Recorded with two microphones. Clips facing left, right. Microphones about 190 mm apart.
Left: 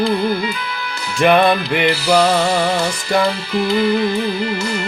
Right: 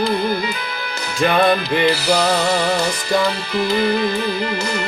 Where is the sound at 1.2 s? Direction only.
70° left (ahead or behind).